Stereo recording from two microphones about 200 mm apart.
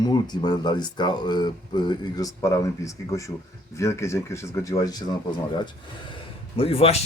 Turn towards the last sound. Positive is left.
turn(degrees=30)  # may be behind; listen again after turning